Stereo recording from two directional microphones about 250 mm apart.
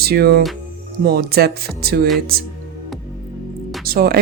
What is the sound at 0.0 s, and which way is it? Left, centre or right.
Speech, right.